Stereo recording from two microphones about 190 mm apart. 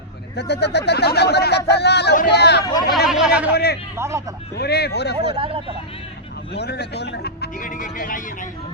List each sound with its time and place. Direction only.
0.3 s speech: 60° left (ahead or behind)
3.1 s speech: 5° right (ahead or behind)
3.5 s speech: 55° left (ahead or behind)
3.9 s speech: 15° right (ahead or behind)
4.5 s speech: 55° left (ahead or behind)
5.3 s speech: 30° right (ahead or behind)
6.5 s speech: 60° left (ahead or behind); by 8.4 s 45° left (ahead or behind)